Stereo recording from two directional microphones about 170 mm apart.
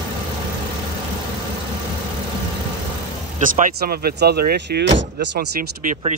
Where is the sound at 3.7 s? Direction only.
65° right (ahead or behind).